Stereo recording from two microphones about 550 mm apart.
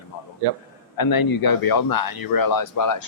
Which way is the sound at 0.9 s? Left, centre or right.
Left.